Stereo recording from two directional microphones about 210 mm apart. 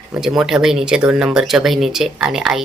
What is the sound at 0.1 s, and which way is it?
Speech, centre (ahead or behind).